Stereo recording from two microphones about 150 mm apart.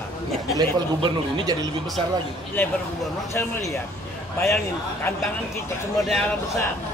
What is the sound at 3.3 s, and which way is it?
Speech, 20° left (ahead or behind).